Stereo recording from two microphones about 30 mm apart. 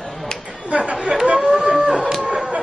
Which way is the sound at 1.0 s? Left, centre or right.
Right.